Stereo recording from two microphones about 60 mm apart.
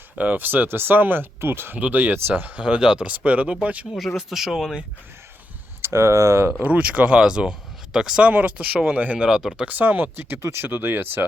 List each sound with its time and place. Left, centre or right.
0.2 s speech: right
2.6 s speech: centre
3.1 s speech: right
3.9 s speech: centre
5.8 s speech: right
6.6 s speech: right
8.3 s speech: right
9.1 s speech: centre
9.6 s speech: right